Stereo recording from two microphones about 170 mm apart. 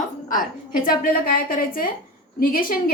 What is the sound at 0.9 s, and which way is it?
A woman's voice, 60° left (ahead or behind).